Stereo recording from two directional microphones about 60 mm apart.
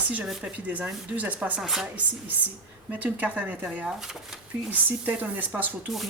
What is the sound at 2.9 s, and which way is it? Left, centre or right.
Speech, right.